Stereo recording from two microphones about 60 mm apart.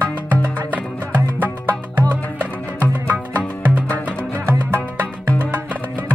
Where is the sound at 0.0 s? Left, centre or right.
Right.